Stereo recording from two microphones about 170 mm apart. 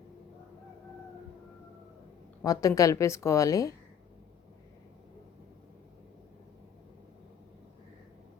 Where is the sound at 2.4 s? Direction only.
20° left (ahead or behind).